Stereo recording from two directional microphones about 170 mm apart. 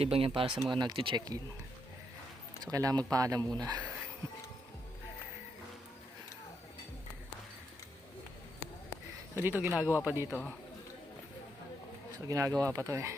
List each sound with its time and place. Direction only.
0.0 s speech: 35° right (ahead or behind)
2.7 s speech: 20° right (ahead or behind)
9.3 s speech: 10° right (ahead or behind)
10.2 s speech: 10° left (ahead or behind)
12.3 s speech: 20° right (ahead or behind)